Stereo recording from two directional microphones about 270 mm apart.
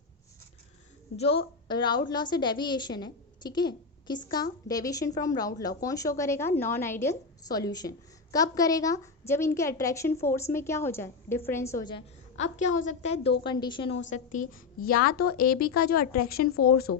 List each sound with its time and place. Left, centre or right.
1.1 s a woman's voice: left
14.1 s a woman's voice: left
16.9 s speech: left